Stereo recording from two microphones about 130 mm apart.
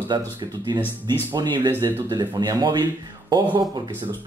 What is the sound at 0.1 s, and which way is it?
Speech, 35° right (ahead or behind).